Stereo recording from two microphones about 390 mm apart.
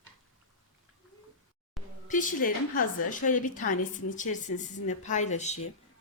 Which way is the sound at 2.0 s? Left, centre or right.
Centre.